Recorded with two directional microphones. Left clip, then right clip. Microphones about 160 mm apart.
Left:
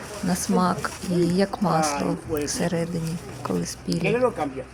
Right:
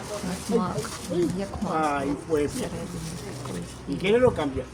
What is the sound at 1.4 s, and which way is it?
Speech, 40° left (ahead or behind).